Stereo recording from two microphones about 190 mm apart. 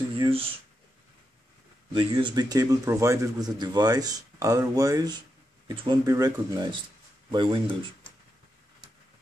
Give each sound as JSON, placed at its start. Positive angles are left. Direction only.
{"t": 0.2, "sound": "a man's voice", "side_deg": -30}
{"t": 1.9, "sound": "a man's voice", "side_deg": -25}